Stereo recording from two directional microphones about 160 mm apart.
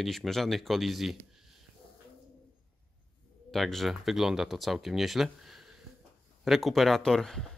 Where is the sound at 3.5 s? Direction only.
Centre (ahead or behind).